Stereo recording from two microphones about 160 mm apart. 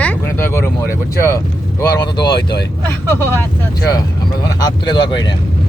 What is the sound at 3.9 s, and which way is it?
Speech, 25° left (ahead or behind).